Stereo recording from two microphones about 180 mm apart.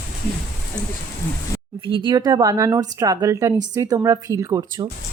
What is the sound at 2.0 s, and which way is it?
Speech, 25° right (ahead or behind).